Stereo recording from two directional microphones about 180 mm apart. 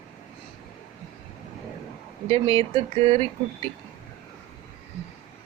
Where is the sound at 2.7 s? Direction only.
30° right (ahead or behind).